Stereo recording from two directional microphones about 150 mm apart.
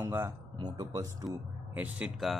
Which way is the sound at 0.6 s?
25° right (ahead or behind).